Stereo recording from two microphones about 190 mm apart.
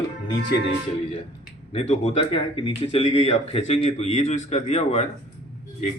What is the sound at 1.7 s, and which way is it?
Speech, 35° left (ahead or behind).